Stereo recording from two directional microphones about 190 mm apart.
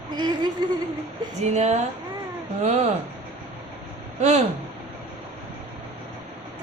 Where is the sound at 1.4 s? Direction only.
35° right (ahead or behind).